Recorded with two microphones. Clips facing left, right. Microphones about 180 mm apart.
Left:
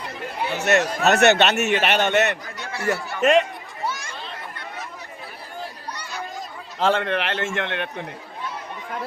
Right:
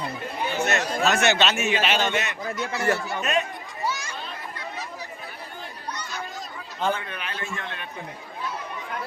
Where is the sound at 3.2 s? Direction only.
85° left.